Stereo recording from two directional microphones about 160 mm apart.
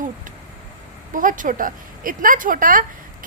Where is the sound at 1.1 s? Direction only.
55° right (ahead or behind).